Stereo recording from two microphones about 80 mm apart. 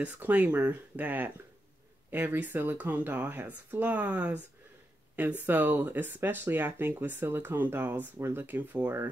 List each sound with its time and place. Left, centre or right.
0.0 s speech: centre
5.4 s speech: right